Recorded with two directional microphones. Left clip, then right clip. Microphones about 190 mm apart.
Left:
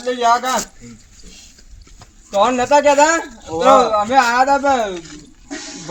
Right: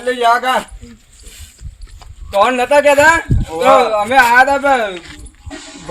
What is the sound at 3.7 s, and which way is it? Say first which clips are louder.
Speech: right 1 dB; 25° right (ahead or behind).